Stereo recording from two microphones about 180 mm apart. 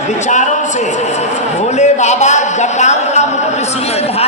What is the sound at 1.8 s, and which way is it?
A man's voice, 40° left (ahead or behind).